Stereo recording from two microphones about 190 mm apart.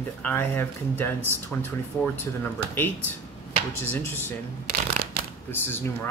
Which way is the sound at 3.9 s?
10° left (ahead or behind).